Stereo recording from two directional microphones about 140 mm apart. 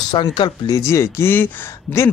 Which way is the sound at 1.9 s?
5° left (ahead or behind).